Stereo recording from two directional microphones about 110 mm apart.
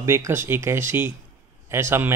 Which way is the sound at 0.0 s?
25° right (ahead or behind).